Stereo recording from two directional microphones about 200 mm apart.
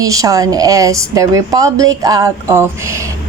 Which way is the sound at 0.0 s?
15° right (ahead or behind).